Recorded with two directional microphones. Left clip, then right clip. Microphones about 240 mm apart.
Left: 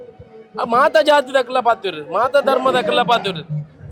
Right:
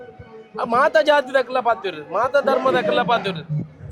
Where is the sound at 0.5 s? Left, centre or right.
Right.